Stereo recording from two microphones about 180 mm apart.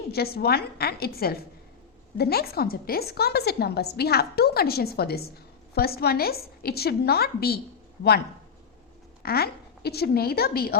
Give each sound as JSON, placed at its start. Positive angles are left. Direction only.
{"t": 0.1, "sound": "a woman's voice", "side_deg": 60}
{"t": 9.2, "sound": "a woman's voice", "side_deg": 60}